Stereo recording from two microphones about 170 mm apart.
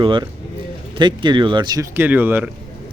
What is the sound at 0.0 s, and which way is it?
Speech, 30° right (ahead or behind).